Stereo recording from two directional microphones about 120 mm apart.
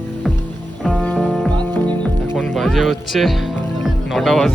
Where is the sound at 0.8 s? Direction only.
Centre (ahead or behind).